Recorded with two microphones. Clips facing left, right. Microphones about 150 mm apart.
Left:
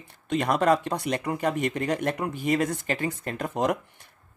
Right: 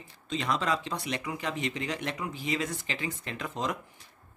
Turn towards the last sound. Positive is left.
turn(degrees=50)  # may be behind; listen again after turning